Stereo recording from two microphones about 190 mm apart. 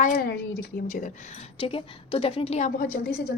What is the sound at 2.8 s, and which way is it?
Speech, 55° left (ahead or behind).